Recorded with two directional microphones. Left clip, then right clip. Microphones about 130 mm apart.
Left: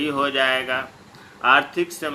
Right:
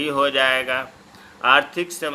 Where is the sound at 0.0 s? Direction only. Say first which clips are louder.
Right 2 dB; 65° right (ahead or behind).